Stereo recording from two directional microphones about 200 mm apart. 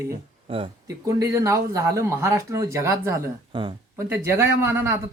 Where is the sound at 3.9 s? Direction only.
15° right (ahead or behind).